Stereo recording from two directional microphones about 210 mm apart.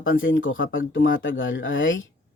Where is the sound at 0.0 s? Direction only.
70° left (ahead or behind).